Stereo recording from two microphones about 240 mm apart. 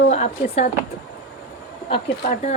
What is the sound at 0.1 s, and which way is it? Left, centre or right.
Speech, left.